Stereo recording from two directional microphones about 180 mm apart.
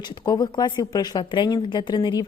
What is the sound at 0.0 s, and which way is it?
Speech, 25° left (ahead or behind).